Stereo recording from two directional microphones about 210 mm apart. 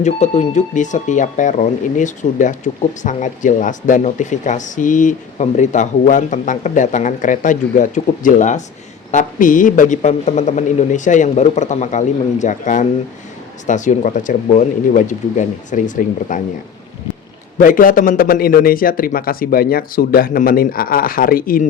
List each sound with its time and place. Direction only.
0.0 s speech: 35° left (ahead or behind)
17.6 s a man's voice: 40° left (ahead or behind)